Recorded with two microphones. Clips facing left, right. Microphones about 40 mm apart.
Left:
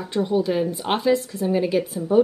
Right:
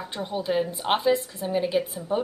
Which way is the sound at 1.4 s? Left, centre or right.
Centre.